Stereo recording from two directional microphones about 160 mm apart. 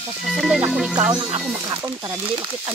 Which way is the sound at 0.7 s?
5° right (ahead or behind).